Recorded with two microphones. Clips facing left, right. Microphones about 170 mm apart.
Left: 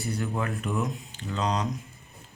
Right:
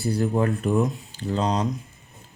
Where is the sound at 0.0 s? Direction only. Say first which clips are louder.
Right 8 dB; 35° right (ahead or behind).